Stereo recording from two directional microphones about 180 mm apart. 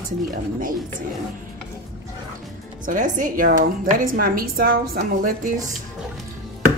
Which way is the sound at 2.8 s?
45° right (ahead or behind).